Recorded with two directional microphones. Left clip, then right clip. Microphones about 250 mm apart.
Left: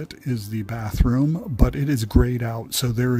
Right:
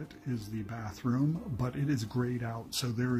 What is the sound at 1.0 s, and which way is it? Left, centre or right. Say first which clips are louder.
Speech: left 10 dB; left.